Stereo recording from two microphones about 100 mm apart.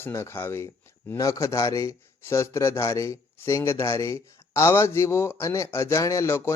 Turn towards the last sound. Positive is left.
turn(degrees=25)  # may be behind; listen again after turning